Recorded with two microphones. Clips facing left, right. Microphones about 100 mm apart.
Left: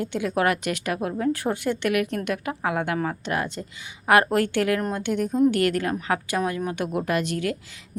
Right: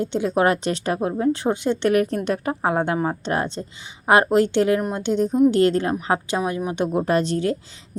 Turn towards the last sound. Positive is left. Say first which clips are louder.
# right 5 dB
turn(degrees=-30)  # may be behind; listen again after turning